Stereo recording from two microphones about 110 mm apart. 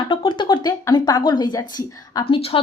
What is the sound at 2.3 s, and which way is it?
Speech, 55° left (ahead or behind).